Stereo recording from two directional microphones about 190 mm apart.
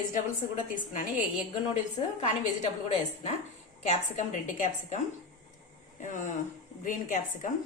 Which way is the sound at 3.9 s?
40° left (ahead or behind).